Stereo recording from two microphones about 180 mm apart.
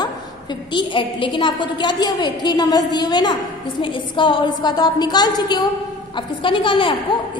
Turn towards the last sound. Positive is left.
turn(degrees=30)  # may be behind; listen again after turning